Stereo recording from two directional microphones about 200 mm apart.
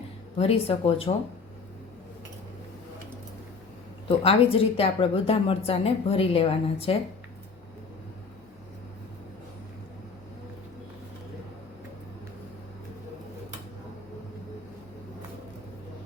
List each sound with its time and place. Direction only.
0.3 s speech: 30° left (ahead or behind)
4.2 s speech: 30° left (ahead or behind)